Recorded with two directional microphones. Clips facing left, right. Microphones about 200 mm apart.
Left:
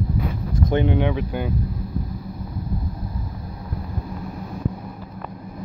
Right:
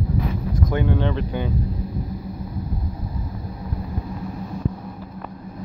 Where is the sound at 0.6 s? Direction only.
20° left (ahead or behind).